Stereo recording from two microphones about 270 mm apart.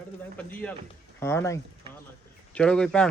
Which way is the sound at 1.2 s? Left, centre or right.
Centre.